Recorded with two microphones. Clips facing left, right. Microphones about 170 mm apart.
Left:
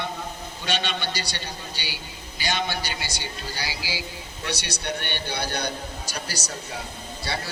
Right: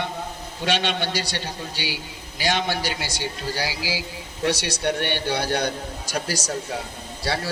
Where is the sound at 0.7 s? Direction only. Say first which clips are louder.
Right 4 dB; 90° right.